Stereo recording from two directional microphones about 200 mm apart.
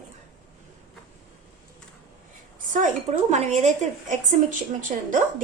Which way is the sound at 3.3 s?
35° right (ahead or behind).